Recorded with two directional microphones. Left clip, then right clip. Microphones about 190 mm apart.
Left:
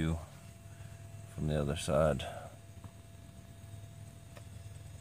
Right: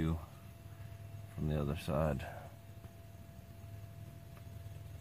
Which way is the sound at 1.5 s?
30° left (ahead or behind).